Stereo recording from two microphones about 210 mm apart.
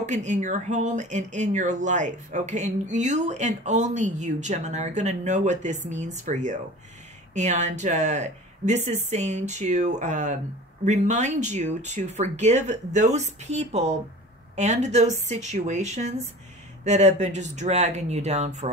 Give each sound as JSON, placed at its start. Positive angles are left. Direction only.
{"t": 0.0, "sound": "speech", "side_deg": -35}